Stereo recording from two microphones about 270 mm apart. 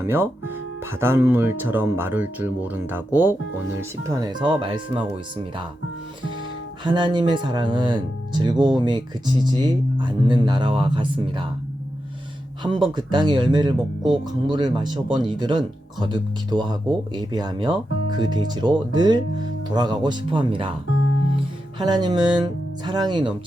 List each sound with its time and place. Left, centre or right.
0.0 s speech: centre
6.8 s speech: centre
12.6 s speech: centre
20.9 s music: left
21.8 s speech: centre